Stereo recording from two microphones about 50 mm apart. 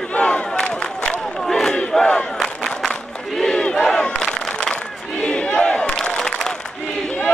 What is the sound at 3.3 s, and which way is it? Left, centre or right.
Battle cry, centre.